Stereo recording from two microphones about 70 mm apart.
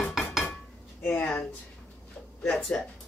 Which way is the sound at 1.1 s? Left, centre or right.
Left.